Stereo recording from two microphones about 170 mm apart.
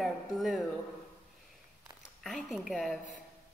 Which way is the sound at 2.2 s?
Centre (ahead or behind).